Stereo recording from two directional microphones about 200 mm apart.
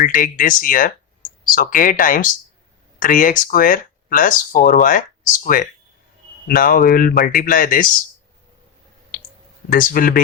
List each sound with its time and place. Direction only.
0.0 s speech: 45° left (ahead or behind)
9.7 s speech: 45° left (ahead or behind)